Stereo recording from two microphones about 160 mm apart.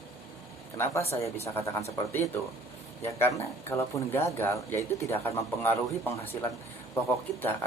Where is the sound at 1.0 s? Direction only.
40° left (ahead or behind).